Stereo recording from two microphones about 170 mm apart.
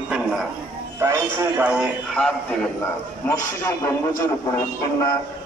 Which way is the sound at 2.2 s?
5° left (ahead or behind).